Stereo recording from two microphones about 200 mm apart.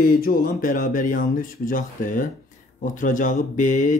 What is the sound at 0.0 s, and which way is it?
Speech, 45° left (ahead or behind).